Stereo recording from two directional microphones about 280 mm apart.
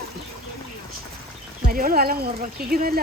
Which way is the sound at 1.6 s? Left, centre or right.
Right.